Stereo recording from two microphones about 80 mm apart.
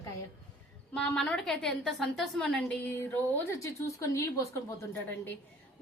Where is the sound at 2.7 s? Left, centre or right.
Left.